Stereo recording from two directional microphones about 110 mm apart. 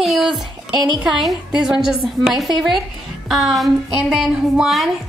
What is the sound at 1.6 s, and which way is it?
A woman's voice, 5° right (ahead or behind).